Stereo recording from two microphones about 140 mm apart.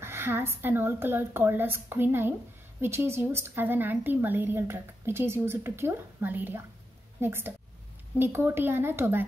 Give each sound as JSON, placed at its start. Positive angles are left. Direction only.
{"t": 0.0, "sound": "a woman's voice", "side_deg": -15}